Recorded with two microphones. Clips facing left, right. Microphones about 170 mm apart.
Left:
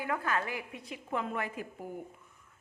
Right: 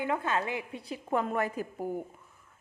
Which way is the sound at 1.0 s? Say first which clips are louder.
Right 5 dB; 45° right (ahead or behind).